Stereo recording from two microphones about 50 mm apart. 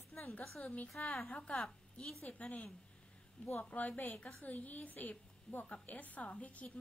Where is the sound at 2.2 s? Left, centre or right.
Left.